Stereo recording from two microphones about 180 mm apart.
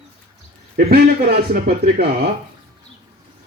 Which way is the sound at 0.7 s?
60° right (ahead or behind).